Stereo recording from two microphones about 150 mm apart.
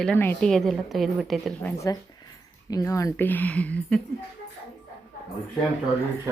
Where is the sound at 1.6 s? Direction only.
20° left (ahead or behind).